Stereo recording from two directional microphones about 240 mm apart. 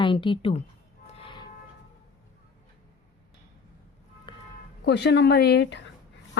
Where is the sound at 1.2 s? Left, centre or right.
Centre.